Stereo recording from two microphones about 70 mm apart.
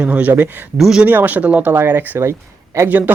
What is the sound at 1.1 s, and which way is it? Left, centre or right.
Speech, right.